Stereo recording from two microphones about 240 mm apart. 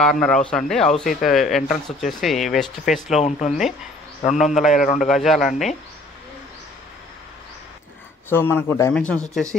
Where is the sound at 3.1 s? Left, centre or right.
Left.